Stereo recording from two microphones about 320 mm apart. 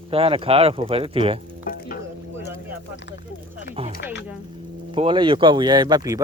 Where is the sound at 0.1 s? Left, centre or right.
Centre.